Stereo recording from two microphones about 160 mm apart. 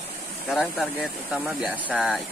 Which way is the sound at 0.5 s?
5° right (ahead or behind).